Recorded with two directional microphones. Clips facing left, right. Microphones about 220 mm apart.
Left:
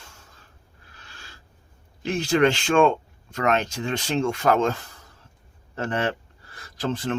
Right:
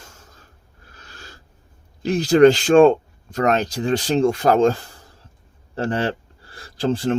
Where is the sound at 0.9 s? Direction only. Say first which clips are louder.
Right 6 dB; 40° right (ahead or behind).